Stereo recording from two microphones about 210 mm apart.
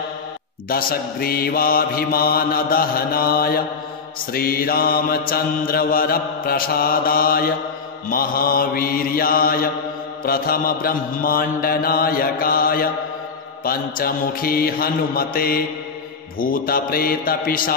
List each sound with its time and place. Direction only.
0.7 s mantra: 45° left (ahead or behind)